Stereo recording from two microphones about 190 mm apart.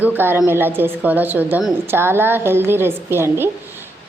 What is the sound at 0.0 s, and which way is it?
A woman's voice, 10° right (ahead or behind).